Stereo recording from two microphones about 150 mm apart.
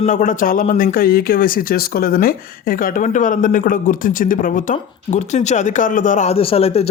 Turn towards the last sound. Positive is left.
turn(degrees=40)  # may be behind; listen again after turning